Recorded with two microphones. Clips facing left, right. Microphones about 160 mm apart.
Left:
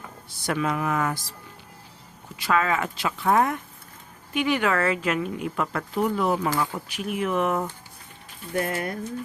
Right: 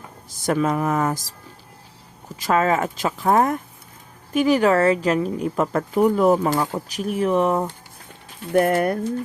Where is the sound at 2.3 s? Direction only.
40° right (ahead or behind).